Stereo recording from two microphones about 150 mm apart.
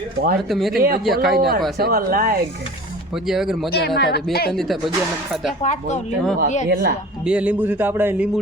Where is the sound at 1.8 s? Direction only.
90° right.